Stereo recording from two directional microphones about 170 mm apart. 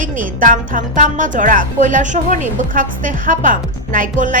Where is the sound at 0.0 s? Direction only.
50° right (ahead or behind).